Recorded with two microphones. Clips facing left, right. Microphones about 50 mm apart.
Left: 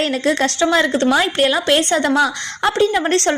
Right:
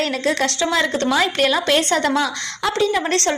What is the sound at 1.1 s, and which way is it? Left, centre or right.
Speech, centre.